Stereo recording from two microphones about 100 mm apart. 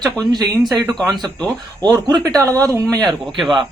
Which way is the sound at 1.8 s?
45° right (ahead or behind).